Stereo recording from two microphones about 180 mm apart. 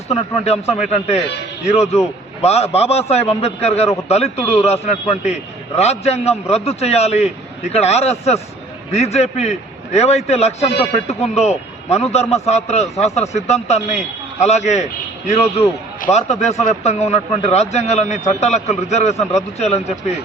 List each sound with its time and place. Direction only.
0.1 s a man's voice: 35° left (ahead or behind)